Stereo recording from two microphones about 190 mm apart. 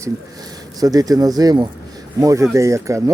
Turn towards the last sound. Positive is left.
turn(degrees=-15)  # may be behind; listen again after turning